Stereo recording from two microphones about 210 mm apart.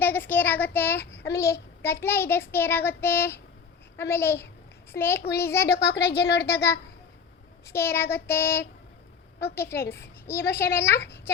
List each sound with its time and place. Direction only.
0.0 s child singing: 10° left (ahead or behind)
1.8 s speech: 10° left (ahead or behind)
5.6 s speech: 50° left (ahead or behind)
7.7 s speech: 10° left (ahead or behind)